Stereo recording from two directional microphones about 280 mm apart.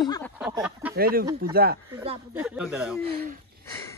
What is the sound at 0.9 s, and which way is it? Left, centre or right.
Speech, right.